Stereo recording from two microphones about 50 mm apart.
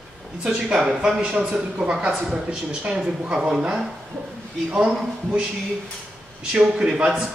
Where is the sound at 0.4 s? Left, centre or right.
Centre.